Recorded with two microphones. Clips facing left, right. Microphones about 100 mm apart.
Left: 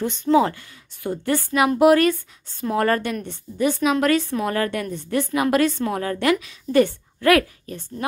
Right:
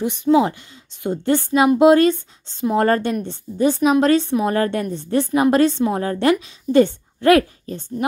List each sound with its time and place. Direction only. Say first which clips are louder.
0.0 s a woman's voice: right 2 dB; 15° right (ahead or behind)